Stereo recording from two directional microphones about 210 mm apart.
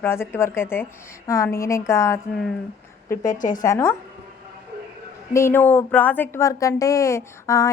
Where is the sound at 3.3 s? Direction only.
40° left (ahead or behind).